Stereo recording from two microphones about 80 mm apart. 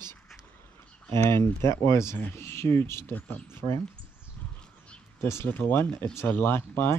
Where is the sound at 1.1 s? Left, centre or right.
Left.